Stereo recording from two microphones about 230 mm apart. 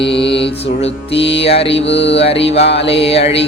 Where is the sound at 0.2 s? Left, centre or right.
Left.